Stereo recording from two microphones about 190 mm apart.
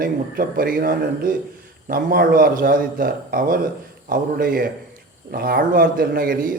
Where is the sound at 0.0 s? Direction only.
50° right (ahead or behind).